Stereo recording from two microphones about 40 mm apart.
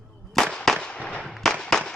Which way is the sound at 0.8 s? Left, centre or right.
Left.